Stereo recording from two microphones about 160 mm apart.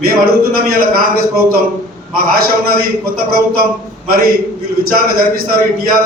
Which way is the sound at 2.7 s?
70° right (ahead or behind).